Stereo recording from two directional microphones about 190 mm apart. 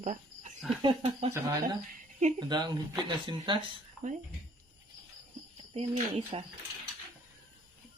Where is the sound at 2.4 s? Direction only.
25° right (ahead or behind).